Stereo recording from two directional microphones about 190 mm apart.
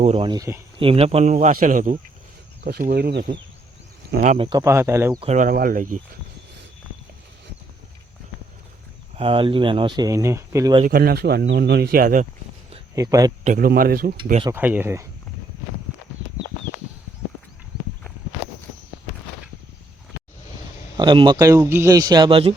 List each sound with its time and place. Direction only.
0.0 s speech: 30° right (ahead or behind)
0.8 s speech: 30° right (ahead or behind)
2.6 s speech: 55° right (ahead or behind)
4.1 s speech: 40° right (ahead or behind)
4.4 s speech: 15° right (ahead or behind)
5.2 s speech: 35° right (ahead or behind)
5.5 s speech: 50° right (ahead or behind)
9.1 s speech: 30° right (ahead or behind)
10.8 s speech: 50° right (ahead or behind)
13.0 s speech: 20° right (ahead or behind)
13.4 s speech: 45° right (ahead or behind)
14.5 s speech: 10° right (ahead or behind)
21.0 s speech: 25° right (ahead or behind)